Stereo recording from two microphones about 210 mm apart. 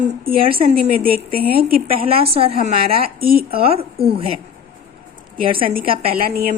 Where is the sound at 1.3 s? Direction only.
45° right (ahead or behind).